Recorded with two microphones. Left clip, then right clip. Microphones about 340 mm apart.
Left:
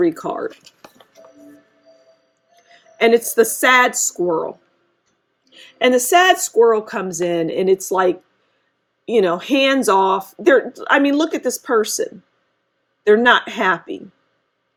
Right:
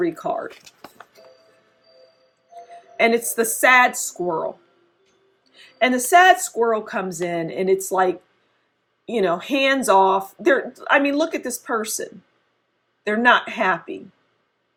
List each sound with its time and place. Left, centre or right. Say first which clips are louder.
0.0 s speech: left 4 dB; left
3.0 s speech: left 5 dB; left
5.5 s speech: left 5 dB; left
13.1 s speech: left 4 dB; left